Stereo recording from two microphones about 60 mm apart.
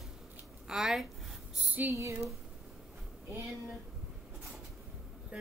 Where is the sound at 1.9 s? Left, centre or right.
Right.